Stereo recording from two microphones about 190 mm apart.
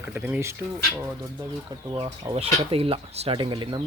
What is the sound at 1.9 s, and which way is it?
Speech, 20° right (ahead or behind).